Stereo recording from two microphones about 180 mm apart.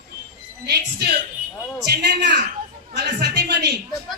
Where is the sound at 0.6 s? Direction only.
65° right (ahead or behind).